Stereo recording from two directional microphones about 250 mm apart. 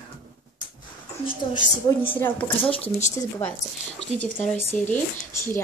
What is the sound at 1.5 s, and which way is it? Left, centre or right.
Speech, left.